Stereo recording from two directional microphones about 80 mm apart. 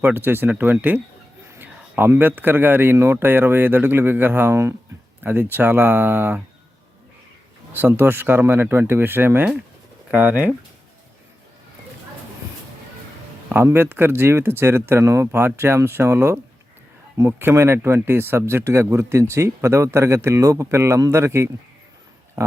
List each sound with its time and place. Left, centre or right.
0.0 s a man's voice: right
7.7 s a man's voice: right
13.7 s speech: right